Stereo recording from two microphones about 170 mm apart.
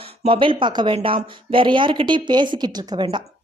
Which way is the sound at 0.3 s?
30° right (ahead or behind).